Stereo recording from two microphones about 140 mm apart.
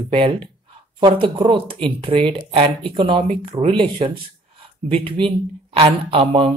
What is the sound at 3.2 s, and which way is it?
Speech, 50° right (ahead or behind).